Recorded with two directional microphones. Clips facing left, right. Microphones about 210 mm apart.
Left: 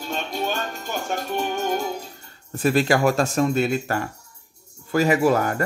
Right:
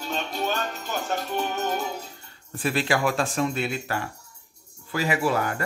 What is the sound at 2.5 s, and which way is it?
Speech, 45° left (ahead or behind).